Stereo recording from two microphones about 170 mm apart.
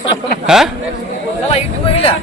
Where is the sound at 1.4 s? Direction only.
35° left (ahead or behind).